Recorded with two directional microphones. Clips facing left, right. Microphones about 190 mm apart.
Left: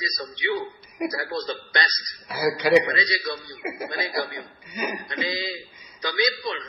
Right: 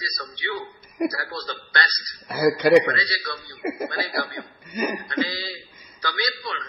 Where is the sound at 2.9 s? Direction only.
20° left (ahead or behind).